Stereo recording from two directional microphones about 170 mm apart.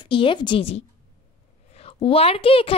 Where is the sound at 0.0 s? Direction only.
30° left (ahead or behind).